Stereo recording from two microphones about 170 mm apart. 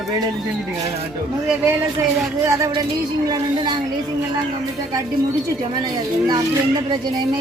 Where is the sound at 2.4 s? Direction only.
20° right (ahead or behind).